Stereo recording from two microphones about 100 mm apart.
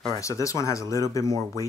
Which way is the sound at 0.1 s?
30° left (ahead or behind).